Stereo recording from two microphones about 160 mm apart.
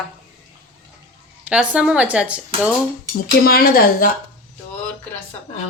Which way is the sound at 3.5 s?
70° left (ahead or behind).